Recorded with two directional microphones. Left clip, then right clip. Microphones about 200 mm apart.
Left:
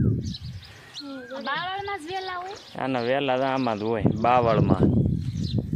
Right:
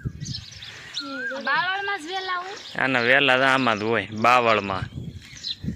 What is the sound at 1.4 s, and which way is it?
Speech, centre (ahead or behind).